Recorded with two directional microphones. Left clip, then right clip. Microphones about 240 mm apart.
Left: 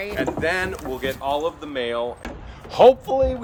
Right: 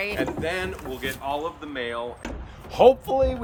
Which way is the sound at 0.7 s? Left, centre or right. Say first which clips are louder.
Left 4 dB; left.